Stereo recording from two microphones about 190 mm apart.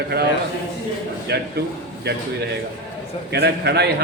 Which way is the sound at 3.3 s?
60° right (ahead or behind).